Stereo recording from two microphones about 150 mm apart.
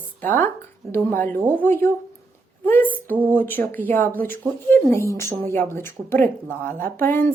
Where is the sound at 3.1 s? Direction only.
10° right (ahead or behind).